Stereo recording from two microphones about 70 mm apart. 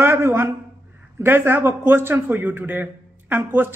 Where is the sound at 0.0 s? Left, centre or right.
Right.